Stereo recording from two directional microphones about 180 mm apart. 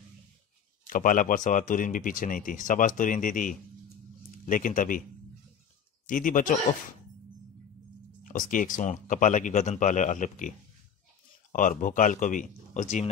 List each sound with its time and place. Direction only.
0.8 s speech: 45° left (ahead or behind)
6.0 s speech: 50° left (ahead or behind)
8.2 s speech: 50° left (ahead or behind)
11.5 s speech: 45° left (ahead or behind)